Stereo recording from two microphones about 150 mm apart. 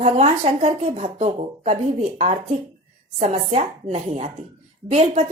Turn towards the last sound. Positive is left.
turn(degrees=-45)  # may be behind; listen again after turning